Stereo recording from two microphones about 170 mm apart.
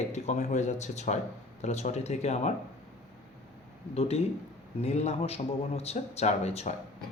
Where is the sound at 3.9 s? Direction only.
35° left (ahead or behind).